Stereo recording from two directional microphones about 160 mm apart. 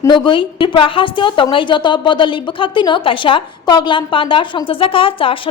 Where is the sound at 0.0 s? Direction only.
30° left (ahead or behind).